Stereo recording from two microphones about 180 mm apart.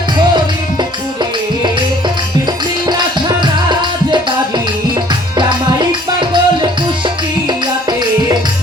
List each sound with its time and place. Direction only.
2.8 s music: 25° right (ahead or behind)